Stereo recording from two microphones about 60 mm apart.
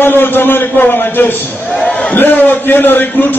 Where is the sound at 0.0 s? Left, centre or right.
Left.